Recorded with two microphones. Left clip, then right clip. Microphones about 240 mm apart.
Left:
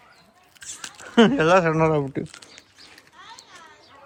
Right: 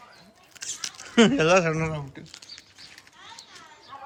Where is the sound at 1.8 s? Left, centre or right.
Centre.